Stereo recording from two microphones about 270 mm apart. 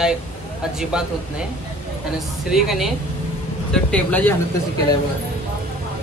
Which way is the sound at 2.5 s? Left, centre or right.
Centre.